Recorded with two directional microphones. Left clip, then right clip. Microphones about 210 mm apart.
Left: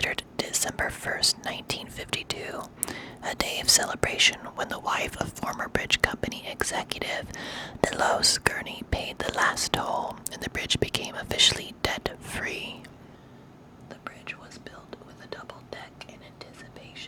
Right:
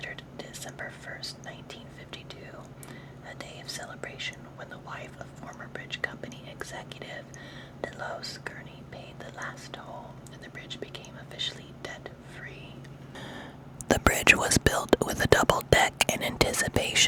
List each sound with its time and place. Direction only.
0.0 s speech: 35° left (ahead or behind)
13.8 s speech: 50° right (ahead or behind)